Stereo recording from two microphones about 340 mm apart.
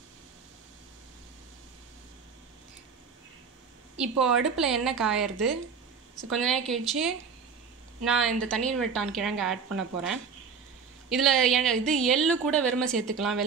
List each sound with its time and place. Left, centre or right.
3.9 s a woman's voice: centre